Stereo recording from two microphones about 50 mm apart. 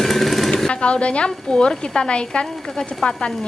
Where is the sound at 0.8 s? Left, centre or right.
Left.